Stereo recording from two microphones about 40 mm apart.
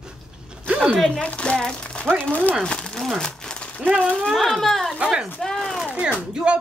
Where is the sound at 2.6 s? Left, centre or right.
Centre.